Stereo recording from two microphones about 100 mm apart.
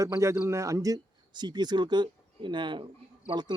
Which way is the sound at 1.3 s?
45° right (ahead or behind).